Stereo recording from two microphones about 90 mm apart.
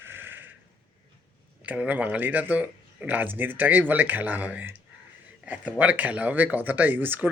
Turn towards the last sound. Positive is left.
turn(degrees=-20)  # may be behind; listen again after turning